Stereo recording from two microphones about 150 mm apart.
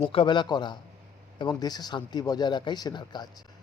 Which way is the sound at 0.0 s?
35° left (ahead or behind).